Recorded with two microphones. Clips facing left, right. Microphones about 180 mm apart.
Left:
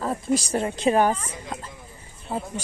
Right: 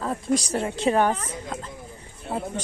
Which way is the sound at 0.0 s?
5° left (ahead or behind).